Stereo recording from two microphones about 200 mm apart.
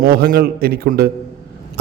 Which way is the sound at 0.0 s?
45° right (ahead or behind).